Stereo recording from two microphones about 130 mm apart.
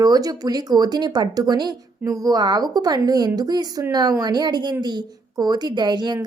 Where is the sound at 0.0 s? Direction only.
30° right (ahead or behind).